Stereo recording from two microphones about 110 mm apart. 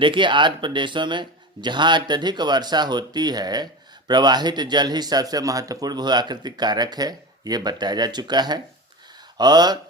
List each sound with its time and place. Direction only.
0.0 s a man's voice: 45° right (ahead or behind)